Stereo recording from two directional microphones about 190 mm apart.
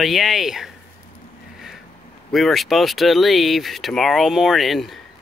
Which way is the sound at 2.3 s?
Centre (ahead or behind).